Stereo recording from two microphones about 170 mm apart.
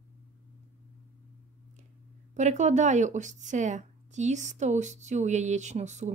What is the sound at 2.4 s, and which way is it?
A woman's voice, 45° right (ahead or behind).